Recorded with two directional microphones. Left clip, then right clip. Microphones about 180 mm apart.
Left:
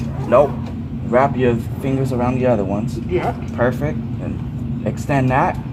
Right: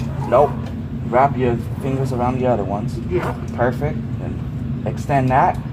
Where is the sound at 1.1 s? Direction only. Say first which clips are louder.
Left 1 dB; 35° left (ahead or behind).